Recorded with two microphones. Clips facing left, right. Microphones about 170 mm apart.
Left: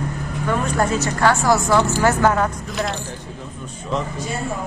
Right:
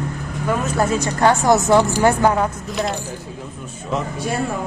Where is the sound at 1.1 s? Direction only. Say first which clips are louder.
Right 2 dB; 20° right (ahead or behind).